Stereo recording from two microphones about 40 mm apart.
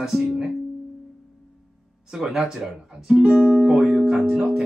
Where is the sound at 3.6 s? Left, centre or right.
Centre.